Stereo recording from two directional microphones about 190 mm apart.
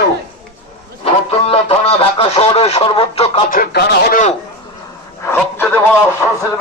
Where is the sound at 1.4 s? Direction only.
30° left (ahead or behind).